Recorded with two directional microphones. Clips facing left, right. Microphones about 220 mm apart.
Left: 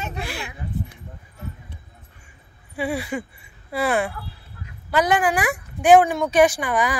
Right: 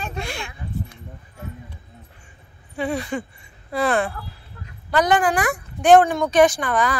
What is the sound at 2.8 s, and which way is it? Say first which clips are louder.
A woman's voice: right 1 dB; 10° left (ahead or behind).